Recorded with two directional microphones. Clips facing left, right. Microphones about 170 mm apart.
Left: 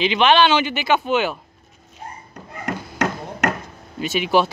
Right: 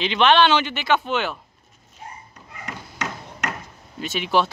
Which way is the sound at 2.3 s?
55° left (ahead or behind).